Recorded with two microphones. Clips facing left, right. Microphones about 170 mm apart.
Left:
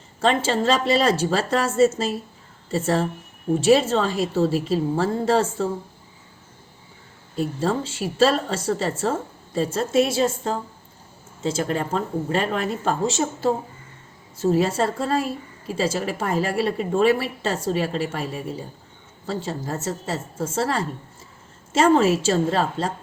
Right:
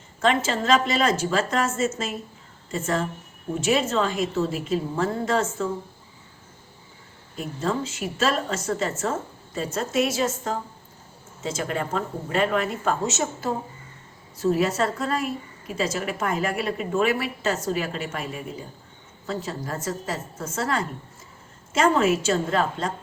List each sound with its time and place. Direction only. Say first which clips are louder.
0.2 s a woman's voice: left 2 dB; 30° left (ahead or behind)
7.3 s a woman's voice: left 4 dB; 35° left (ahead or behind)